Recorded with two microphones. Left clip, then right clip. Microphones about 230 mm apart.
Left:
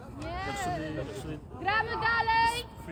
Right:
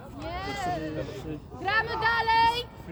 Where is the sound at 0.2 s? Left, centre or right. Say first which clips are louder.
Right 2 dB; right.